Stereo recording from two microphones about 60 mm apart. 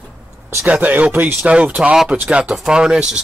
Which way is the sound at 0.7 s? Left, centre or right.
Right.